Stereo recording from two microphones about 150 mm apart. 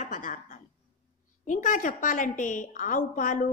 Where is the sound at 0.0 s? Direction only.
60° left (ahead or behind).